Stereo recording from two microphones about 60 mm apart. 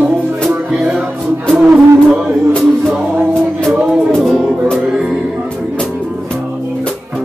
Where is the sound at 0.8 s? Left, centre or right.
Right.